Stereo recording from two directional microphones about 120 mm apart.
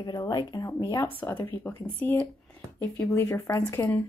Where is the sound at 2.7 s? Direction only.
20° left (ahead or behind).